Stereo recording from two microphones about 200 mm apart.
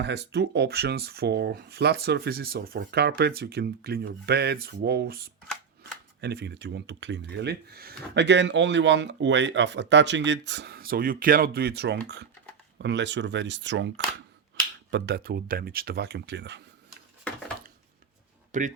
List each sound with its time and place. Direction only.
0.0 s speech: 55° right (ahead or behind)
18.5 s speech: 35° right (ahead or behind)